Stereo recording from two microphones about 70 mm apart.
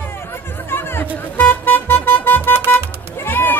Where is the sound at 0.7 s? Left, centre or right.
Left.